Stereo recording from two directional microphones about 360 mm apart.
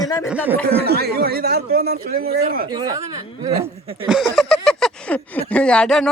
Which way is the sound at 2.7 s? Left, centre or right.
Centre.